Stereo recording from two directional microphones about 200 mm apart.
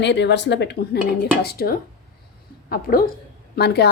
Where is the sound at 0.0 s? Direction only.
60° left (ahead or behind).